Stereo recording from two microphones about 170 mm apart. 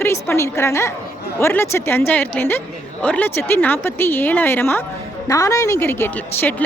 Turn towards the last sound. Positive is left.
turn(degrees=15)  # may be behind; listen again after turning